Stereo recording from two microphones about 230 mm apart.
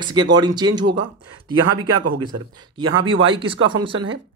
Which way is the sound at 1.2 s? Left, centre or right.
Right.